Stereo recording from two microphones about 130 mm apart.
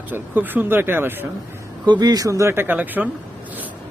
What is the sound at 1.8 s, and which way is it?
Speech, 35° right (ahead or behind).